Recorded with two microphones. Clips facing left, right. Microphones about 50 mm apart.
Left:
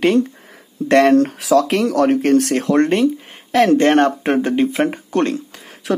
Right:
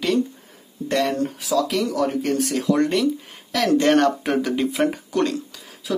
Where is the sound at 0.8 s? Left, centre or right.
Left.